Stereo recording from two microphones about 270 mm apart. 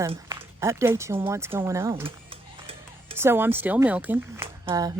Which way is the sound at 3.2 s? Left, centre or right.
Centre.